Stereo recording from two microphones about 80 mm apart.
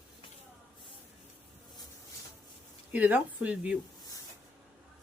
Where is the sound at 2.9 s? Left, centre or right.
Centre.